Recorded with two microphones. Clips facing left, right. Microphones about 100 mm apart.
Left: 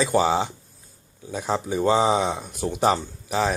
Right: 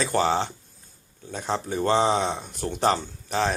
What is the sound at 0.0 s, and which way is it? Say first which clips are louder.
Speech: left 2 dB; 5° left (ahead or behind).